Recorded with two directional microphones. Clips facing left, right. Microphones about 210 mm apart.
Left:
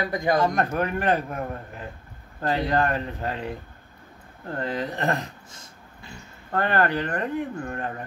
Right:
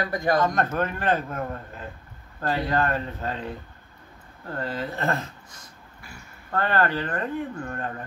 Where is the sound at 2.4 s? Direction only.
20° left (ahead or behind).